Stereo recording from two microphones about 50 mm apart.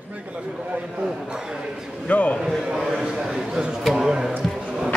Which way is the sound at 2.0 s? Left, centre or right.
Left.